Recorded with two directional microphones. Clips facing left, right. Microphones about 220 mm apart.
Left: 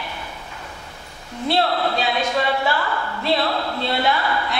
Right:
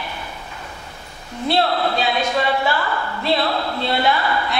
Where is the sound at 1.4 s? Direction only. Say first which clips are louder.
Right 1 dB; 15° right (ahead or behind).